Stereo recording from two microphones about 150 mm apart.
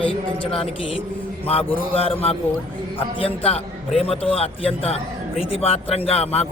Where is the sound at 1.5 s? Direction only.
40° left (ahead or behind).